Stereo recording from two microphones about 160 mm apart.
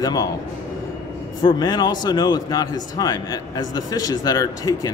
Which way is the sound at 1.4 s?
25° left (ahead or behind).